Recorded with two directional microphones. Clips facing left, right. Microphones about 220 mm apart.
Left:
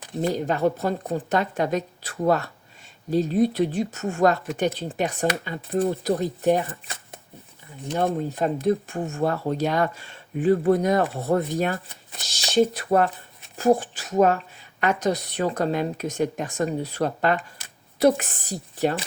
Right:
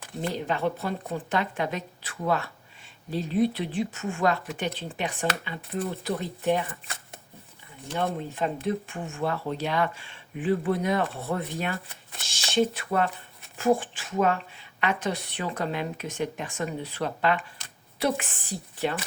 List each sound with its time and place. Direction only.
0.2 s speech: 40° left (ahead or behind)
7.9 s speech: 40° left (ahead or behind)